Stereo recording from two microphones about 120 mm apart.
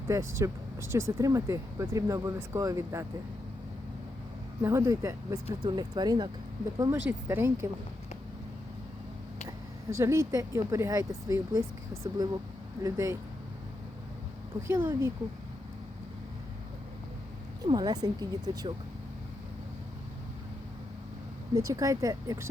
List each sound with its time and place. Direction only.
0.1 s speech: 25° right (ahead or behind)
4.6 s speech: 20° right (ahead or behind); by 6.3 s 40° right (ahead or behind)
6.9 s speech: 20° right (ahead or behind)
10.0 s speech: 25° right (ahead or behind)
14.7 s speech: 20° right (ahead or behind)
17.7 s speech: 35° right (ahead or behind)
21.5 s speech: 30° right (ahead or behind)